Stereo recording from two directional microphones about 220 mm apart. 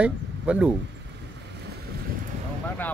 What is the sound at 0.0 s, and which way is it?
Speech, 5° right (ahead or behind).